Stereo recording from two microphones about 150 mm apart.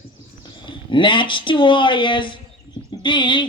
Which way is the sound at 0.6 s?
35° left (ahead or behind).